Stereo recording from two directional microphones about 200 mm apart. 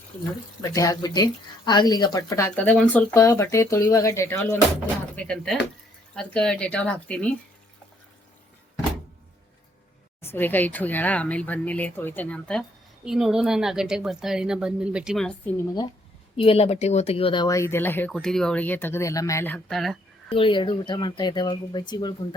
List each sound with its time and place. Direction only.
0.6 s speech: 15° left (ahead or behind)
10.2 s speech: 10° left (ahead or behind)
16.4 s speech: 30° left (ahead or behind); by 20.0 s centre (ahead or behind)
20.3 s speech: 25° left (ahead or behind)